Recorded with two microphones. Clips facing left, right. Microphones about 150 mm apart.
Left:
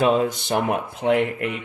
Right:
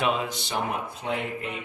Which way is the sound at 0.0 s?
40° left (ahead or behind).